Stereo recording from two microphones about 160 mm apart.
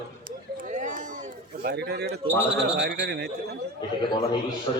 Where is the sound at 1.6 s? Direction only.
90° right.